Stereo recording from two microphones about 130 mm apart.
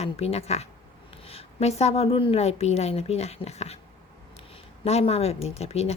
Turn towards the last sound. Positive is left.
turn(degrees=55)  # may be behind; listen again after turning